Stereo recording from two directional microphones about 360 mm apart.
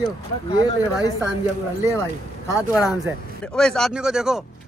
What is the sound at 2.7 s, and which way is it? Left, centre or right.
Speech, centre.